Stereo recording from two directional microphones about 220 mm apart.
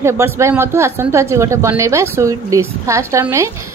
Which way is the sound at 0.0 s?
10° right (ahead or behind).